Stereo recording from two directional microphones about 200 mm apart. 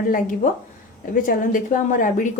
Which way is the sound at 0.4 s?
40° left (ahead or behind).